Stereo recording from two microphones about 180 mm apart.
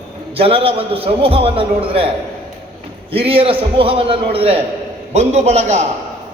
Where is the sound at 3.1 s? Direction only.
30° right (ahead or behind).